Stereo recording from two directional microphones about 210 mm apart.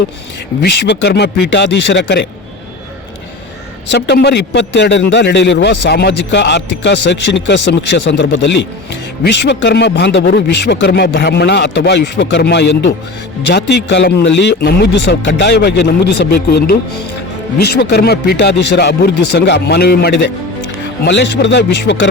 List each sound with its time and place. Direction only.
0.6 s a man's voice: 55° left (ahead or behind)
3.8 s a man's voice: 55° left (ahead or behind)